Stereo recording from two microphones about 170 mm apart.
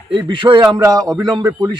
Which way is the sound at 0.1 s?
30° right (ahead or behind).